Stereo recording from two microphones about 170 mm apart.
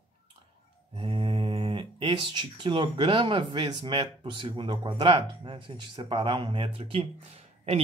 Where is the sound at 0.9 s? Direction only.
30° right (ahead or behind).